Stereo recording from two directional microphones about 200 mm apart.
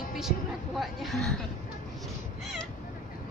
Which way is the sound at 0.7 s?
Centre (ahead or behind).